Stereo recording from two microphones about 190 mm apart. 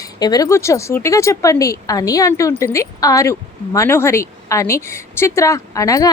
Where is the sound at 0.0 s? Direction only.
20° left (ahead or behind).